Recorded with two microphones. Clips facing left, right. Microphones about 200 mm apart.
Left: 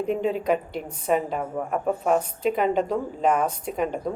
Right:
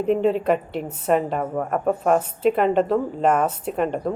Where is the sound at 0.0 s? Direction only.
5° right (ahead or behind).